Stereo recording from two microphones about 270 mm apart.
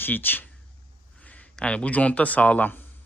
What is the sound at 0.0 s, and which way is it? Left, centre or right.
Speech, centre.